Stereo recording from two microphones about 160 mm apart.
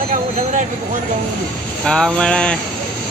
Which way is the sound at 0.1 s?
50° right (ahead or behind).